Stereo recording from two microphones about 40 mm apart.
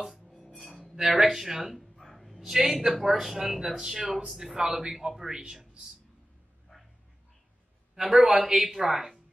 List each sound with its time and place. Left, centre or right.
0.6 s a sound: centre
1.1 s speech: centre
2.0 s a sound: centre
2.3 s a man's voice: centre
6.7 s dog: centre
8.3 s speech: centre